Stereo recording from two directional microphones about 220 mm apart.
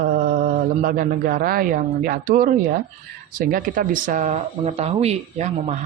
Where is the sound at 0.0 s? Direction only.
40° right (ahead or behind).